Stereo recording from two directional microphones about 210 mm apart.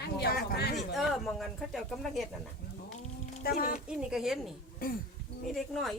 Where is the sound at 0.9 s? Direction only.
Centre (ahead or behind).